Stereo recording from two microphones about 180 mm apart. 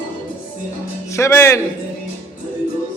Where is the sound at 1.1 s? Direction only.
15° left (ahead or behind).